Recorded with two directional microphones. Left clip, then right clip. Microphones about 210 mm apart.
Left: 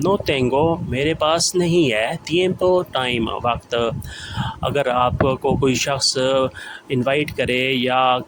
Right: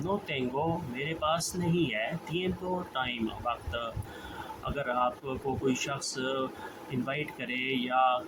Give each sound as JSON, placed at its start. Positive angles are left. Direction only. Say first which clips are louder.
{"t": 0.0, "sound": "speech", "louder": "left 14 dB", "side_deg": 50}